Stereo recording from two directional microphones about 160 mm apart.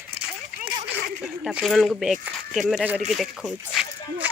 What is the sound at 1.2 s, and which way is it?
Speech, 5° right (ahead or behind).